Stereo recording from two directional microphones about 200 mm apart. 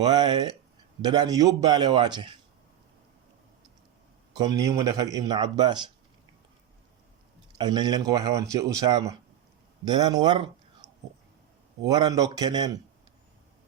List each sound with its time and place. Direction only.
0.0 s a man's voice: 20° right (ahead or behind)
4.4 s a man's voice: 20° right (ahead or behind)
7.6 s a man's voice: 20° right (ahead or behind)